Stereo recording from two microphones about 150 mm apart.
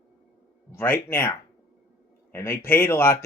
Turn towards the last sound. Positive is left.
turn(degrees=15)  # may be behind; listen again after turning